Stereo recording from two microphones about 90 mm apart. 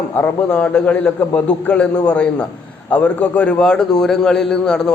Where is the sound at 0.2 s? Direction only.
20° left (ahead or behind).